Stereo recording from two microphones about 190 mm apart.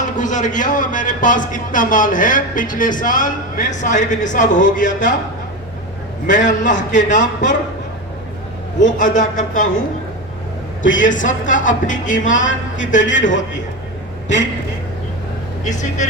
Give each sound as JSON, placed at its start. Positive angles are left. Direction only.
{"t": 0.0, "sound": "a man's voice", "side_deg": 40}
{"t": 6.2, "sound": "a man's voice", "side_deg": 40}
{"t": 8.8, "sound": "a man's voice", "side_deg": 40}
{"t": 10.8, "sound": "a man's voice", "side_deg": 45}
{"t": 15.6, "sound": "a man's voice", "side_deg": 40}